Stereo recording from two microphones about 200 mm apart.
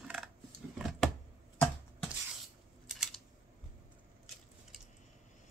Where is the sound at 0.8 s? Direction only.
Centre (ahead or behind).